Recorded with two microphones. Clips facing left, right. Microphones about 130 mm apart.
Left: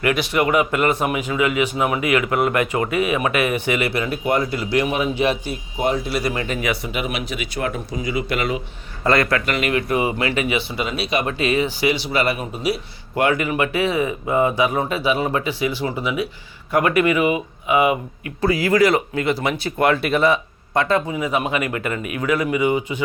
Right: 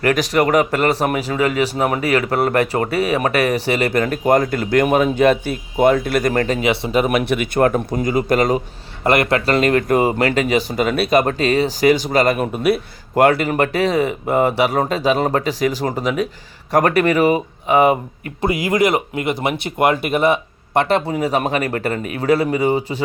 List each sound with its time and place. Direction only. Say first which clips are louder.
0.0 s speech: right 3 dB; 40° right (ahead or behind)
6.6 s speech: right 5 dB; 25° right (ahead or behind)
6.9 s speech: right 9 dB; 45° right (ahead or behind)
9.0 s speech: right 3 dB; 25° right (ahead or behind)
9.6 s speech: right 7 dB; 40° right (ahead or behind)
12.4 s a man's voice: right 6 dB; 55° right (ahead or behind)
13.4 s speech: right 3 dB; 40° right (ahead or behind)
14.3 s speech: right 1 dB; 65° right (ahead or behind)
14.8 s speech: right 3 dB; 40° right (ahead or behind)
18.4 s speech: even; 20° right (ahead or behind)
21.1 s speech: right 3 dB; 40° right (ahead or behind)